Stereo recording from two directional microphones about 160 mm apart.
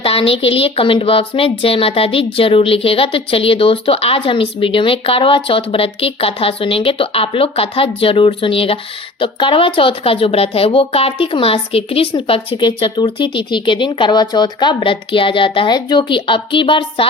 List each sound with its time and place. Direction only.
0.0 s speech: 35° left (ahead or behind)